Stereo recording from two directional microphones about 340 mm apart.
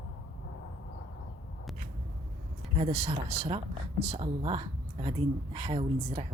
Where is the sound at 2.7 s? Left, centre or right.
Centre.